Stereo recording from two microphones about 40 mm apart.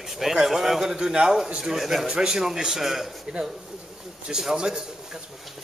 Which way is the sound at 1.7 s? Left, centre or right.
Centre.